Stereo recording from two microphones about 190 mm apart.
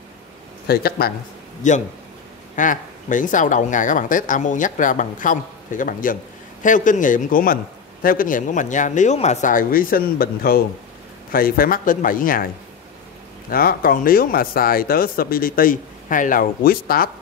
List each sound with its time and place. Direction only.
0.7 s speech: 55° left (ahead or behind)
1.6 s a man's voice: 40° left (ahead or behind)
13.5 s speech: 50° left (ahead or behind)